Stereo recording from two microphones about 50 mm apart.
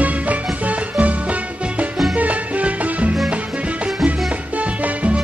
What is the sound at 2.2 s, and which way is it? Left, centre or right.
Music, right.